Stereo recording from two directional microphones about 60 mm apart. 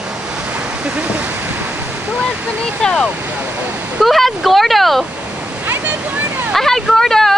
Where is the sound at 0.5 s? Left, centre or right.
Centre.